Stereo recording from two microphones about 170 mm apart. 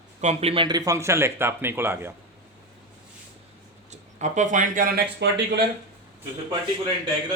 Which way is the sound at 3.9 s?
45° right (ahead or behind).